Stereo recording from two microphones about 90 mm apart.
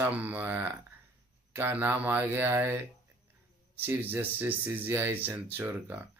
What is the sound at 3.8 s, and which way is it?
Speech, 20° right (ahead or behind).